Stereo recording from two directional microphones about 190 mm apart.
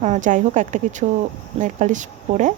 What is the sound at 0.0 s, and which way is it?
Speech, 40° right (ahead or behind).